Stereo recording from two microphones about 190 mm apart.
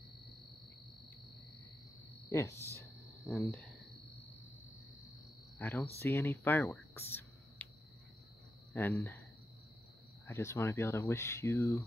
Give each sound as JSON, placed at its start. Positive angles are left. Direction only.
{"t": 2.2, "sound": "speech", "side_deg": 15}
{"t": 3.3, "sound": "speech", "side_deg": 0}
{"t": 5.6, "sound": "speech", "side_deg": 10}
{"t": 8.7, "sound": "speech", "side_deg": 10}
{"t": 10.2, "sound": "speech", "side_deg": 15}